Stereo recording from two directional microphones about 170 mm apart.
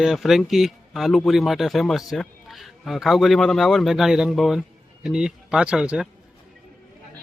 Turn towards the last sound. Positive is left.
turn(degrees=-5)  # may be behind; listen again after turning